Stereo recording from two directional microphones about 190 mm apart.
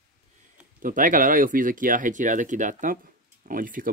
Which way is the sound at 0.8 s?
45° right (ahead or behind).